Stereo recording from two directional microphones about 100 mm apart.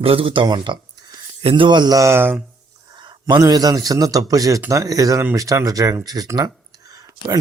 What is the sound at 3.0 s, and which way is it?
A man's voice, 45° right (ahead or behind).